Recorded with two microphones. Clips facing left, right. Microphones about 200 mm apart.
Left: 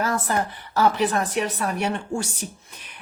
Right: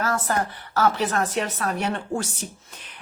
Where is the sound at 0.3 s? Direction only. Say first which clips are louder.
Even; 15° left (ahead or behind).